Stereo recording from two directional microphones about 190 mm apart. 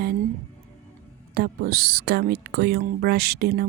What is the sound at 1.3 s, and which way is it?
Speech, 55° right (ahead or behind).